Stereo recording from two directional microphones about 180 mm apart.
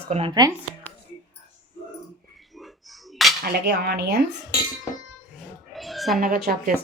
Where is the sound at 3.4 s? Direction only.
65° right (ahead or behind).